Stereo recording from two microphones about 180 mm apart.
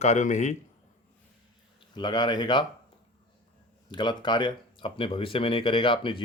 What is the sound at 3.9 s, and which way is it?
Speech, 25° left (ahead or behind).